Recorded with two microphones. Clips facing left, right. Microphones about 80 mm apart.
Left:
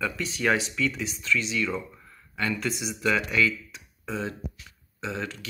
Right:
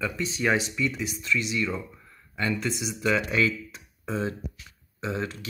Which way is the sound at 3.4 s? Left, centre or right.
Right.